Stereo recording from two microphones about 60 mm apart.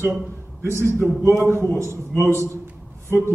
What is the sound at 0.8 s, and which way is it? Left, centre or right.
Speech, left.